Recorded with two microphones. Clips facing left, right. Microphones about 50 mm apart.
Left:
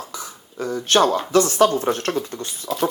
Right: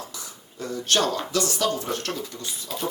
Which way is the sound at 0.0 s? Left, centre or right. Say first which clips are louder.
Left 5 dB; left.